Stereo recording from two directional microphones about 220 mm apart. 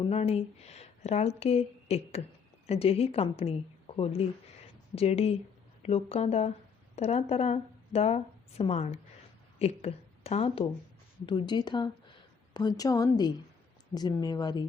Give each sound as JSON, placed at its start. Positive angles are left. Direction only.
{"t": 0.1, "sound": "a woman's voice", "side_deg": 30}